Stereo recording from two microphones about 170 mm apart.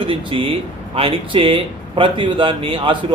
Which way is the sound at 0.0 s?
30° right (ahead or behind).